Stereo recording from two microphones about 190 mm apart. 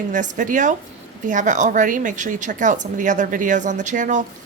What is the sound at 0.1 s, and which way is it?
A woman's voice, 40° right (ahead or behind).